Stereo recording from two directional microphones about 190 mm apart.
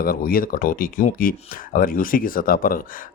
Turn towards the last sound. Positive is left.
turn(degrees=50)  # may be behind; listen again after turning